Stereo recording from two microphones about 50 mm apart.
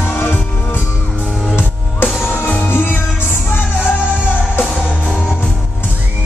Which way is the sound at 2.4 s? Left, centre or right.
Left.